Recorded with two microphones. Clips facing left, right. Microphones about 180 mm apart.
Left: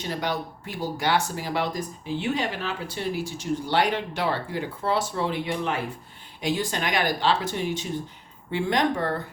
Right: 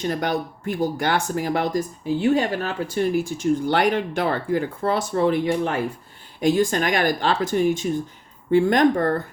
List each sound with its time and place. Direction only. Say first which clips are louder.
0.1 s speech: right 5 dB; 50° right (ahead or behind)